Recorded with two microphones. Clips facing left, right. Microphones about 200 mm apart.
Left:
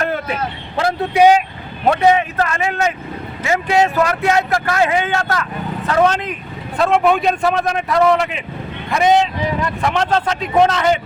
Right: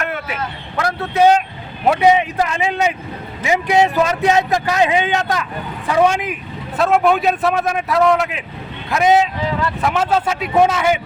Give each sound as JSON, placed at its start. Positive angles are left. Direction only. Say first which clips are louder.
{"t": 0.0, "sound": "vehicle", "louder": "left 4 dB", "side_deg": 35}
{"t": 0.8, "sound": "a man's voice", "louder": "left 2 dB", "side_deg": 20}
{"t": 1.9, "sound": "a man's voice", "louder": "even", "side_deg": -10}